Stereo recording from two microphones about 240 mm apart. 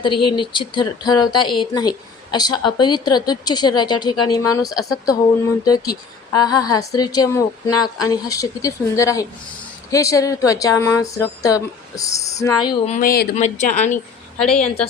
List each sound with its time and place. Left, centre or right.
0.0 s speech: centre
12.9 s speech: left
13.9 s a woman's voice: centre